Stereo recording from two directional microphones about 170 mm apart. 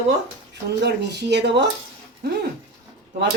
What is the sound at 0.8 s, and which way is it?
Speech, 85° right.